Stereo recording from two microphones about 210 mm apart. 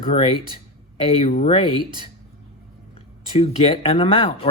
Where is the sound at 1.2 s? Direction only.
30° left (ahead or behind).